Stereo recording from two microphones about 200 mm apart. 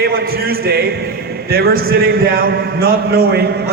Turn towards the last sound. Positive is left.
turn(degrees=-55)  # may be behind; listen again after turning